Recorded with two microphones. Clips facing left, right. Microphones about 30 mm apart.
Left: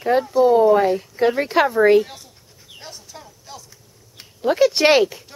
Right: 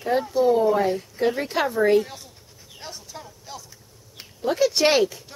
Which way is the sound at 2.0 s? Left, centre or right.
Centre.